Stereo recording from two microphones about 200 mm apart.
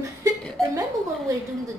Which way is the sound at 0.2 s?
15° right (ahead or behind).